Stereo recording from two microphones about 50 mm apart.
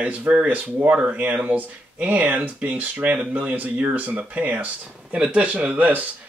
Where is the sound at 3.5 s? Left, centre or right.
Right.